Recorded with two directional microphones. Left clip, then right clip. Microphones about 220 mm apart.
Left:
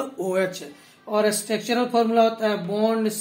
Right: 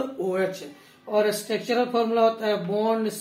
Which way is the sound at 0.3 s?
50° left (ahead or behind).